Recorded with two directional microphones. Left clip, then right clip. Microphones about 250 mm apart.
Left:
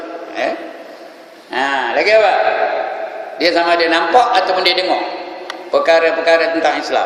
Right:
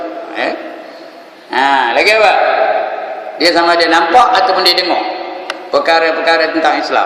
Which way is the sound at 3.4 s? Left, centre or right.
Centre.